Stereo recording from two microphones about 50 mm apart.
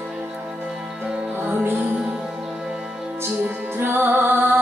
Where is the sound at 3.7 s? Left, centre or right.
Right.